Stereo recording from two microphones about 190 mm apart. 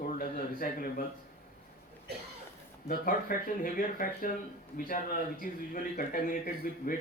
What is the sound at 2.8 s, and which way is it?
Speech, 50° left (ahead or behind).